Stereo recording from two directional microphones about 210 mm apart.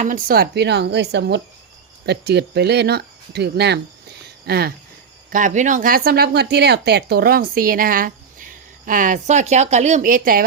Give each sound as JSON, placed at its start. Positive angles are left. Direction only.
{"t": 0.0, "sound": "speech", "side_deg": -40}
{"t": 5.3, "sound": "speech", "side_deg": -35}